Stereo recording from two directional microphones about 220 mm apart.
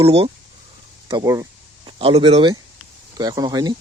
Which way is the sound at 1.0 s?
15° right (ahead or behind).